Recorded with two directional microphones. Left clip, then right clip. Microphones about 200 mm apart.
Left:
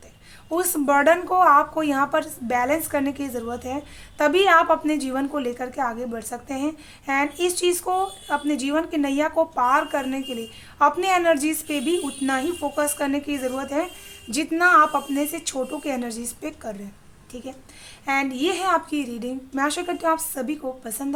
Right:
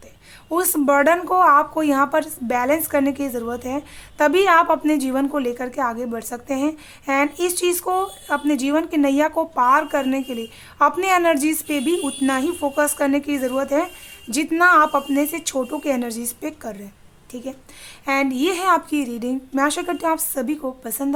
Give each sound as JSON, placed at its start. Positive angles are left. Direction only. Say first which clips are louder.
{"t": 0.5, "sound": "speech", "louder": "right 3 dB", "side_deg": -25}